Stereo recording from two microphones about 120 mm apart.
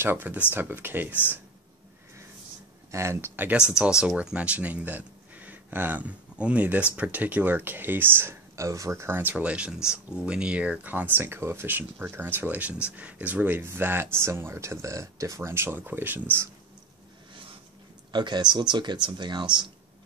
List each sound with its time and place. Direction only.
0.0 s speech: 15° right (ahead or behind)
2.9 s speech: 25° right (ahead or behind)
18.1 s speech: 40° right (ahead or behind)